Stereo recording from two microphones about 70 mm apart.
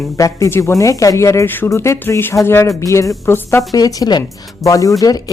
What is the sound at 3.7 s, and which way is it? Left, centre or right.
Speech, left.